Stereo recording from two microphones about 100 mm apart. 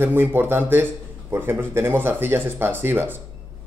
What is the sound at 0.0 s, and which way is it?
Speech, 20° right (ahead or behind).